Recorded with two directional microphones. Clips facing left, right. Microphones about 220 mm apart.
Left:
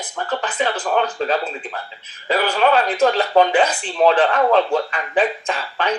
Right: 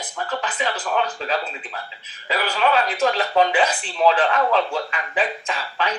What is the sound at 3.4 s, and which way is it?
Speech, 45° left (ahead or behind).